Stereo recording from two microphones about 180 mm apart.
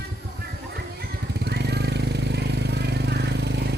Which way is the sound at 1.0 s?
65° right (ahead or behind).